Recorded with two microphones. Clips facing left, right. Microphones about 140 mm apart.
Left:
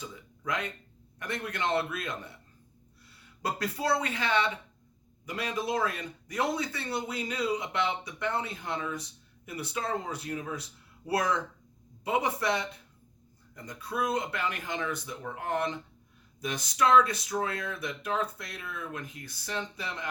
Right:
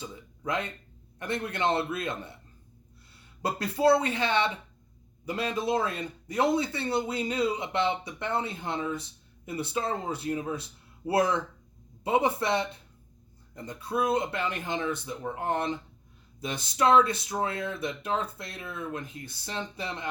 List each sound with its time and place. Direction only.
0.0 s a man's voice: 25° right (ahead or behind)
3.4 s a man's voice: 25° right (ahead or behind)